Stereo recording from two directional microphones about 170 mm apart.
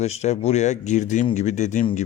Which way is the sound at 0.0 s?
40° left (ahead or behind).